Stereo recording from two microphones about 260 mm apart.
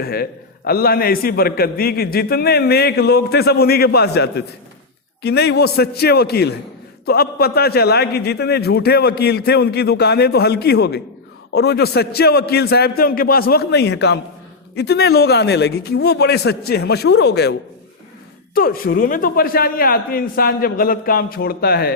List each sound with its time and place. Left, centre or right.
0.0 s a man's voice: left
18.5 s a man's voice: left